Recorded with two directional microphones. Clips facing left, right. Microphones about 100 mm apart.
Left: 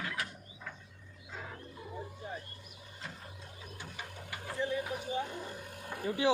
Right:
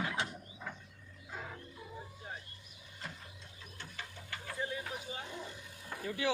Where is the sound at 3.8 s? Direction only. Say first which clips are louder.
Left 2 dB; 15° left (ahead or behind).